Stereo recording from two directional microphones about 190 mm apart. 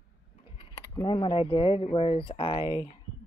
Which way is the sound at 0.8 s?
20° left (ahead or behind).